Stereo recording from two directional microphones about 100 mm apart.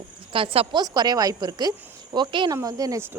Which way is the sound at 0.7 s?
45° right (ahead or behind).